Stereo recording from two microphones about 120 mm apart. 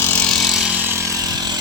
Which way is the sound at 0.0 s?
20° left (ahead or behind).